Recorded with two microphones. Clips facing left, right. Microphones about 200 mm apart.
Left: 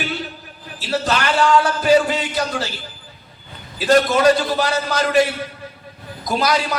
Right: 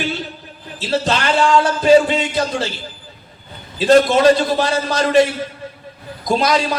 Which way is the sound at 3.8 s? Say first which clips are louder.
Right 3 dB; 25° right (ahead or behind).